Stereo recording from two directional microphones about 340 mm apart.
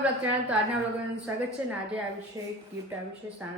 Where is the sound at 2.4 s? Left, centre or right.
Centre.